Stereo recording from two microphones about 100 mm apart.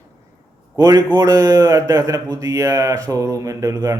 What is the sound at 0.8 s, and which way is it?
Speech, 35° right (ahead or behind).